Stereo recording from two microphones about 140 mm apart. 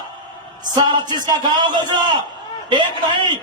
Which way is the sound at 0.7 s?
30° right (ahead or behind).